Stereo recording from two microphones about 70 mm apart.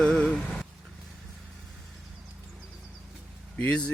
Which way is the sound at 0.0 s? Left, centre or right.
Centre.